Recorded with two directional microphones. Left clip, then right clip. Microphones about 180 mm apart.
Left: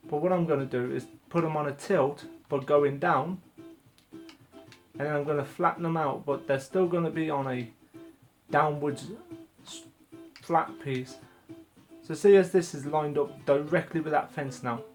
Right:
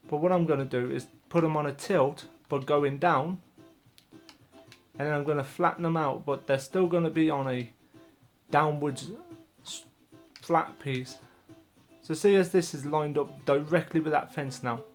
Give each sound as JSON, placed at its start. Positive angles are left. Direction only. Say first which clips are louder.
{"t": 0.1, "sound": "speech", "louder": "right 1 dB", "side_deg": -45}
{"t": 4.9, "sound": "speech", "louder": "even", "side_deg": -40}
{"t": 10.4, "sound": "speech", "louder": "even", "side_deg": -45}